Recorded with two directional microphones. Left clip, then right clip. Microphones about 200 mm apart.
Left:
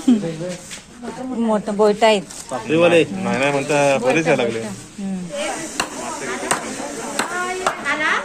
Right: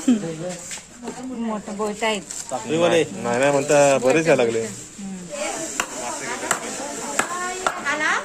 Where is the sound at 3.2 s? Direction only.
35° right (ahead or behind).